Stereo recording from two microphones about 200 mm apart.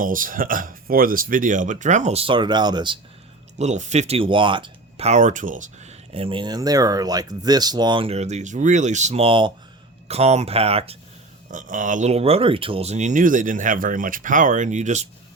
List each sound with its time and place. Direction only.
0.0 s speech: 45° right (ahead or behind); by 3.0 s 20° right (ahead or behind)
3.6 s speech: 35° right (ahead or behind)
11.5 s speech: 40° right (ahead or behind)